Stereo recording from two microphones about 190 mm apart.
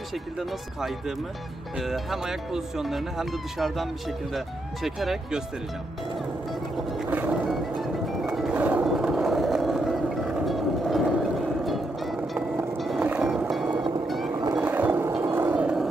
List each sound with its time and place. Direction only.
0.4 s speech: centre (ahead or behind)
6.9 s music: 5° right (ahead or behind)
14.3 s music: 20° right (ahead or behind)
14.6 s music: 10° right (ahead or behind)